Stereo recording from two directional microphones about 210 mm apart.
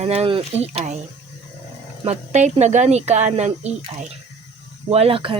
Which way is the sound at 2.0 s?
35° right (ahead or behind).